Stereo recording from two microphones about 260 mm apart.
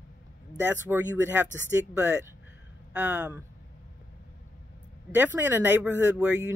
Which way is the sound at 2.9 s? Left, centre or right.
Centre.